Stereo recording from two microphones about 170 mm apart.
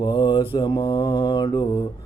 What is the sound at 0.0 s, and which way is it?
Mantra, 30° left (ahead or behind).